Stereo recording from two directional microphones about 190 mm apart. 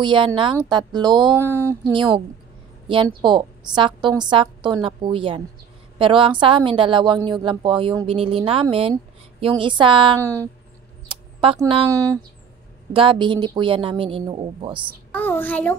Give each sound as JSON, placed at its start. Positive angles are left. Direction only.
{"t": 0.0, "sound": "a woman's voice", "side_deg": -25}
{"t": 1.8, "sound": "a woman's voice", "side_deg": -25}
{"t": 11.9, "sound": "a woman's voice", "side_deg": -15}
{"t": 15.1, "sound": "a child's voice", "side_deg": 10}